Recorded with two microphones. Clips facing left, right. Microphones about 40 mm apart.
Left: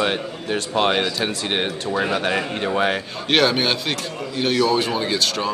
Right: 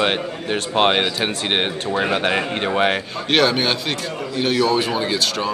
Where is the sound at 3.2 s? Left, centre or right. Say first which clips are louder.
Right 1 dB; centre.